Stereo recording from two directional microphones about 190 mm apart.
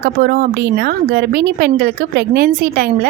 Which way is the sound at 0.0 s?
50° right (ahead or behind).